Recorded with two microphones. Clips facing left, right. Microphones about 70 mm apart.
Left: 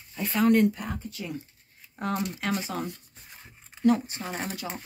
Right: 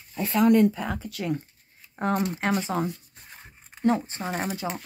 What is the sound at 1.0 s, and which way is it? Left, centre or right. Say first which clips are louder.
Speech: right 5 dB; right.